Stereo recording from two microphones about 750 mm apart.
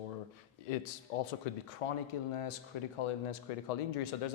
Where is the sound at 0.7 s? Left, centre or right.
Left.